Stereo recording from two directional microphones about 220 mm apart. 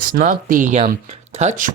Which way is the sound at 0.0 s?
40° right (ahead or behind).